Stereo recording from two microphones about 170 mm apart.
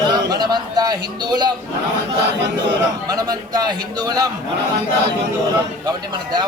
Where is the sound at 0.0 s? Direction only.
25° right (ahead or behind).